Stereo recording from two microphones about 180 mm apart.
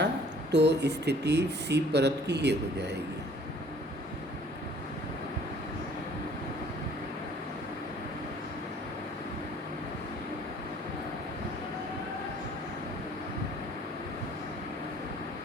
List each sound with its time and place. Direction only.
0.5 s speech: 70° right (ahead or behind)